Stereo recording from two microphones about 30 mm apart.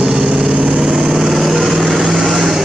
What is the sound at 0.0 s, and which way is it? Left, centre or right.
Vehicle, centre.